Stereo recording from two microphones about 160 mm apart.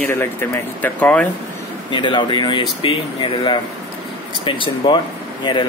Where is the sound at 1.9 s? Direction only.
30° left (ahead or behind).